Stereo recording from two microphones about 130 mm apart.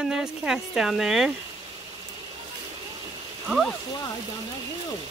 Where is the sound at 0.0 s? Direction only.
5° right (ahead or behind).